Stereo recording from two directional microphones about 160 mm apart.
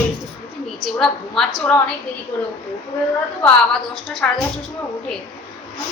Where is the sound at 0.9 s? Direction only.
5° left (ahead or behind).